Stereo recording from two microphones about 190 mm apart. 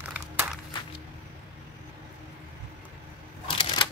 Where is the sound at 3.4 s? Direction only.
25° left (ahead or behind).